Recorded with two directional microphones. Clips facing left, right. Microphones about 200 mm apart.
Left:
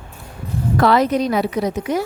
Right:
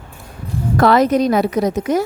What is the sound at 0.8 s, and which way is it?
Speech, 45° right (ahead or behind).